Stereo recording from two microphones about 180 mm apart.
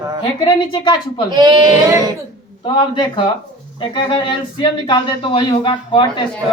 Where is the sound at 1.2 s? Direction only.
25° right (ahead or behind).